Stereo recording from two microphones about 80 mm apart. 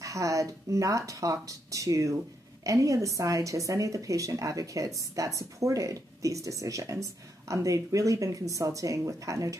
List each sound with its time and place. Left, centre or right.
0.0 s a woman's voice: right